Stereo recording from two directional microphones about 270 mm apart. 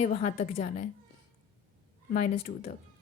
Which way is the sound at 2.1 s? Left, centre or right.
Left.